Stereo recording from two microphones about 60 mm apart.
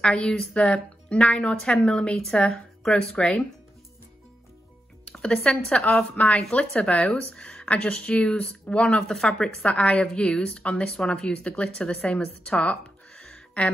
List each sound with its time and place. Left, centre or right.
0.0 s a woman's voice: centre
0.6 s a woman's voice: centre
2.1 s a woman's voice: centre
5.1 s a woman's voice: centre
6.2 s a woman's voice: left
8.8 s a woman's voice: centre
9.7 s a woman's voice: centre